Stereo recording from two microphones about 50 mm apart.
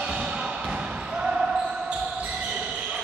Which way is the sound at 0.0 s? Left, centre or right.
Centre.